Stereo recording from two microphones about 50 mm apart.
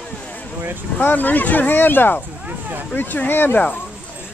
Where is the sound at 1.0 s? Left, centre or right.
Left.